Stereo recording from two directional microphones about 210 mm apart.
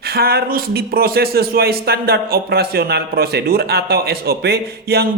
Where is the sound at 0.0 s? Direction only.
50° right (ahead or behind).